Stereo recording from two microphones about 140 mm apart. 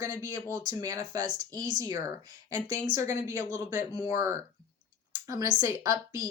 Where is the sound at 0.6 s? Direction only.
25° right (ahead or behind).